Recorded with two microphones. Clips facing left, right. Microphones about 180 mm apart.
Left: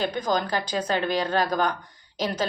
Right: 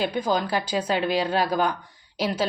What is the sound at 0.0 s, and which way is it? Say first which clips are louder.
Speech: right 1 dB; 5° right (ahead or behind).